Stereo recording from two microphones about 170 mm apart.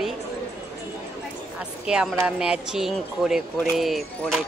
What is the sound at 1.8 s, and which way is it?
Speech, 5° right (ahead or behind).